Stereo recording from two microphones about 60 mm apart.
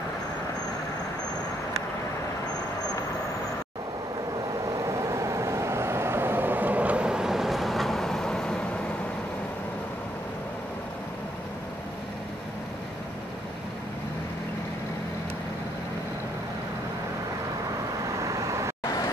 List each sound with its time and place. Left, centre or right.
4.6 s vehicle: right; by 8.6 s centre
18.2 s vehicle: right